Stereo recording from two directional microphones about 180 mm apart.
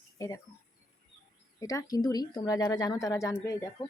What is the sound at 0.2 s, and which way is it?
Speech, 20° left (ahead or behind).